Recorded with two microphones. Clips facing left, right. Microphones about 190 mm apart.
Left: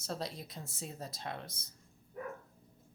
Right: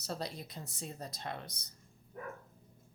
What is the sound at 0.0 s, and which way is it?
Speech, centre (ahead or behind).